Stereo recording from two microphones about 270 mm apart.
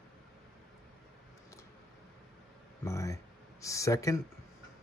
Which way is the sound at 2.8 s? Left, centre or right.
Centre.